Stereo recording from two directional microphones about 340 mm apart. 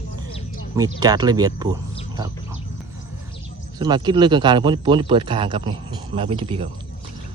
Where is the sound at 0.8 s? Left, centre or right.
Centre.